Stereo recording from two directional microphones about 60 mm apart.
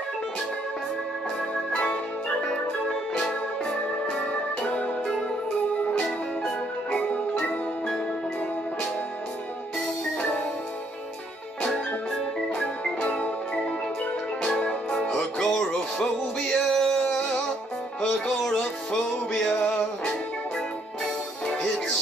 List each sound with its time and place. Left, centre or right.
2.4 s music: centre
4.2 s organ: left
6.9 s music: left
13.0 s music: left
14.4 s music: centre